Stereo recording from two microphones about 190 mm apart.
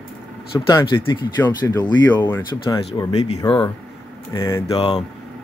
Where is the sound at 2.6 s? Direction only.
30° left (ahead or behind).